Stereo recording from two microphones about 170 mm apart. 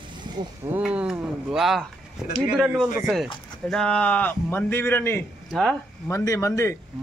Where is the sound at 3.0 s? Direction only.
Centre (ahead or behind).